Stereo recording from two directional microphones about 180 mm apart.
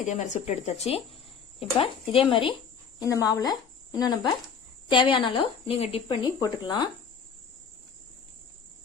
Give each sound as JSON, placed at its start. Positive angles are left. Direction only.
{"t": 0.0, "sound": "speech", "side_deg": 40}